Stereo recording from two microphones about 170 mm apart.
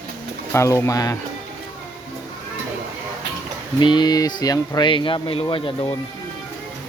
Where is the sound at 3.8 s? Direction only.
25° left (ahead or behind).